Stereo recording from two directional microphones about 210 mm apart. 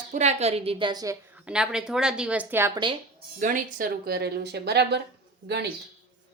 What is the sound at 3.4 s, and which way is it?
Speech, 40° right (ahead or behind).